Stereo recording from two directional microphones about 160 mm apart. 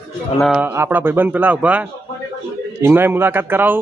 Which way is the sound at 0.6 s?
15° right (ahead or behind).